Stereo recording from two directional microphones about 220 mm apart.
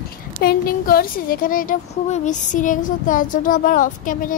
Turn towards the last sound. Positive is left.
turn(degrees=40)  # may be behind; listen again after turning